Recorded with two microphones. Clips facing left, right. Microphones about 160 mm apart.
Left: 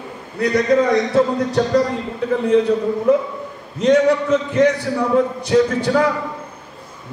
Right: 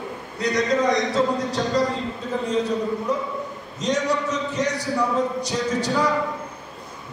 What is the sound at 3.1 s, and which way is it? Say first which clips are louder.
A man's voice: left 9 dB; 60° left (ahead or behind).